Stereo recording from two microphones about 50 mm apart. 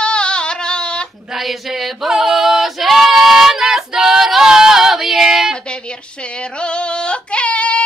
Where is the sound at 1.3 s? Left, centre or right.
Centre.